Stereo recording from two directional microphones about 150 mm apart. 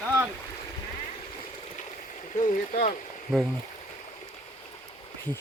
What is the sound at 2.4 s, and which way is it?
Stream, 55° left (ahead or behind).